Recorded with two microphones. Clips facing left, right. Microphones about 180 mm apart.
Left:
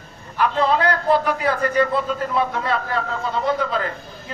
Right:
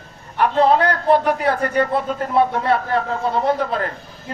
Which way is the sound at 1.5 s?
50° right (ahead or behind).